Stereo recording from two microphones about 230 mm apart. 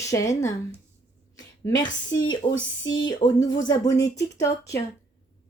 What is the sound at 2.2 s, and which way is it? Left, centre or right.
Speech, centre.